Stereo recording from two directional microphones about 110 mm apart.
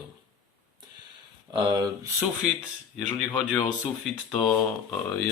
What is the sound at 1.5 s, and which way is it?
Speech, 45° right (ahead or behind).